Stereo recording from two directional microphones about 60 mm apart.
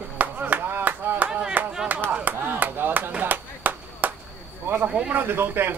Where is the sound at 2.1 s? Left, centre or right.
Right.